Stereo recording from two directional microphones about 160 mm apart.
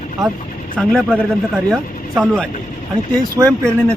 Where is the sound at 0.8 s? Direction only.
10° right (ahead or behind).